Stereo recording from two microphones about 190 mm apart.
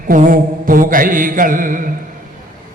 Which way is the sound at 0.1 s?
45° right (ahead or behind).